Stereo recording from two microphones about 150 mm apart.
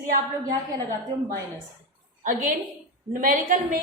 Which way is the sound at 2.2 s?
70° right (ahead or behind).